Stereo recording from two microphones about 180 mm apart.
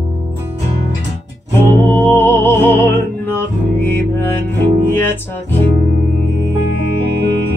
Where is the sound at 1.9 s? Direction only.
10° left (ahead or behind).